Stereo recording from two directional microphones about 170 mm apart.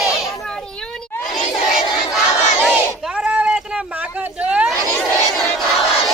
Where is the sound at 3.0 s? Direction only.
5° right (ahead or behind).